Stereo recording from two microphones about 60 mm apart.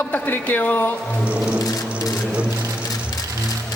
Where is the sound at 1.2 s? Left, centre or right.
Right.